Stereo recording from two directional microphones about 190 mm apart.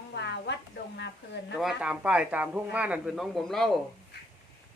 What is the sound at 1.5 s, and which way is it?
A man's voice, 5° right (ahead or behind).